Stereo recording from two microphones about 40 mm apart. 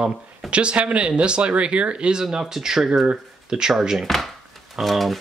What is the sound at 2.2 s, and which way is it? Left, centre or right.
Speech, centre.